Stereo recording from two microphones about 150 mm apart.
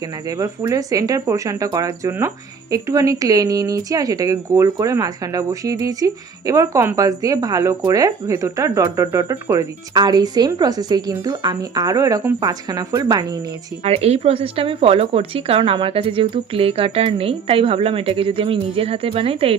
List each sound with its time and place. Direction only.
0.3 s speech: 20° right (ahead or behind)
13.8 s speech: 45° right (ahead or behind)